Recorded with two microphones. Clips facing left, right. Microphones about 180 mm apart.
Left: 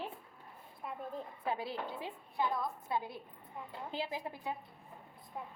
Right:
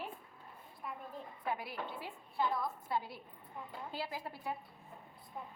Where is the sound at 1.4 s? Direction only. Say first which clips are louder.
Left 2 dB; 25° left (ahead or behind).